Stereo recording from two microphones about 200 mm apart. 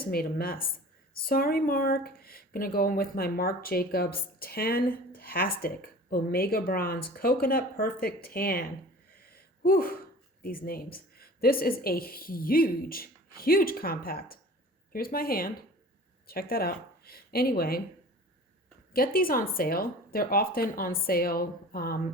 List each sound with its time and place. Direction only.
0.0 s speech: 50° left (ahead or behind)
9.1 s a sound: 50° left (ahead or behind)
10.4 s speech: 45° left (ahead or behind)
18.9 s speech: 45° left (ahead or behind)